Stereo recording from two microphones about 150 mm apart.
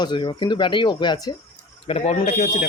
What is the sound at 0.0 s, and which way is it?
Speech, 30° left (ahead or behind).